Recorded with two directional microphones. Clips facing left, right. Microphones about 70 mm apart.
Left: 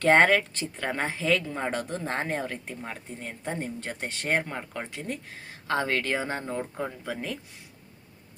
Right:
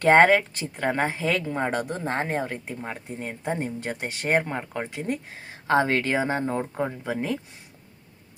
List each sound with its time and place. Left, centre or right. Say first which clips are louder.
0.0 s speech: right 3 dB; centre
2.8 s speech: right 4 dB; right